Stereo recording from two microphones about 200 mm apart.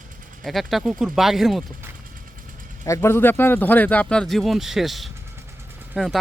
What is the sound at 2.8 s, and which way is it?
Speech, 15° left (ahead or behind).